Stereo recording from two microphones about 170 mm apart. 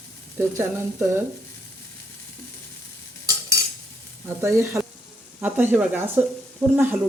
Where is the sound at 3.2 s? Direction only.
20° right (ahead or behind).